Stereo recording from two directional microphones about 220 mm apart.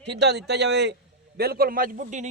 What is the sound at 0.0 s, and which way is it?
A man's voice, 50° right (ahead or behind).